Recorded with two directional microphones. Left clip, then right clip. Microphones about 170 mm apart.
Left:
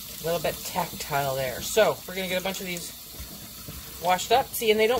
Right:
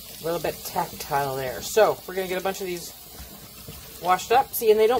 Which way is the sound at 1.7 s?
25° right (ahead or behind).